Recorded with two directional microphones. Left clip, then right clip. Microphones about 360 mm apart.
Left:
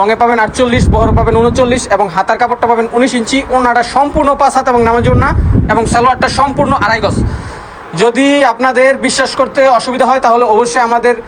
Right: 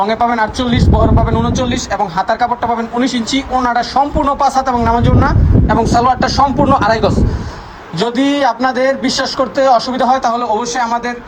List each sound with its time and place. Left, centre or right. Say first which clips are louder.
0.0 s a man's voice: left 4 dB; centre